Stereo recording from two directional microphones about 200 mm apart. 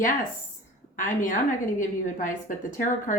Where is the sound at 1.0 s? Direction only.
40° left (ahead or behind).